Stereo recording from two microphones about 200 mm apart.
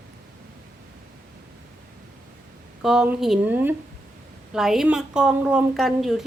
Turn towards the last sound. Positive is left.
turn(degrees=0)  # may be behind; listen again after turning